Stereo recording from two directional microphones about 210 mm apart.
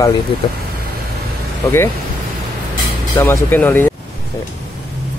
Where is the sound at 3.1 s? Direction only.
10° left (ahead or behind).